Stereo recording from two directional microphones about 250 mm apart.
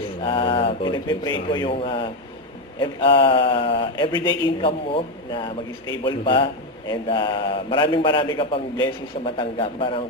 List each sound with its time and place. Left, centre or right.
0.2 s a man's voice: centre